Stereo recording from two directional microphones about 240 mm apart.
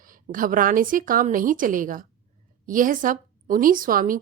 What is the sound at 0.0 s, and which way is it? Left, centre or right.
Speech, right.